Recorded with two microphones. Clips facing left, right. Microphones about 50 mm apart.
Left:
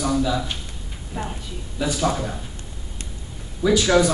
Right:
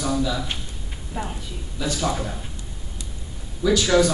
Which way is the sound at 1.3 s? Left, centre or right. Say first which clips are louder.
Left 1 dB; centre.